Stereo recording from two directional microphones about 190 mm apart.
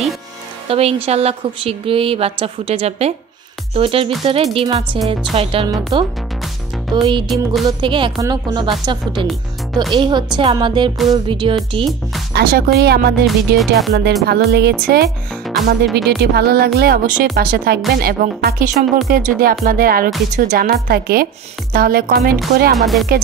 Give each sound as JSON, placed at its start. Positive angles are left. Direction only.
{"t": 0.7, "sound": "speech", "side_deg": -30}
{"t": 7.1, "sound": "speech", "side_deg": -25}
{"t": 12.4, "sound": "speech", "side_deg": -55}
{"t": 13.6, "sound": "speech", "side_deg": 0}
{"t": 14.2, "sound": "speech", "side_deg": -60}
{"t": 22.8, "sound": "speech", "side_deg": 0}